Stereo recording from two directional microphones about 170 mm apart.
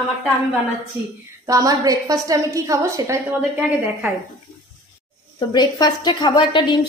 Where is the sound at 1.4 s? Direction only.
20° right (ahead or behind).